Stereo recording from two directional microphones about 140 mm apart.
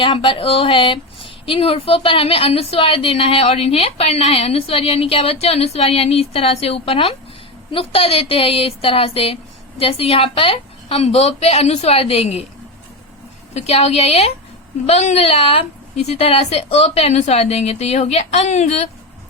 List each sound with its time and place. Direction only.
0.0 s speech: 40° left (ahead or behind)
13.5 s speech: 50° left (ahead or behind)